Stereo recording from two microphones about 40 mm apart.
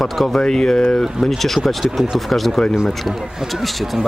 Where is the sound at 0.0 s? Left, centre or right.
Centre.